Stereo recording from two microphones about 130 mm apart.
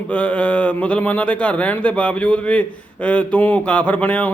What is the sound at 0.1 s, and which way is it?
Speech, 10° left (ahead or behind).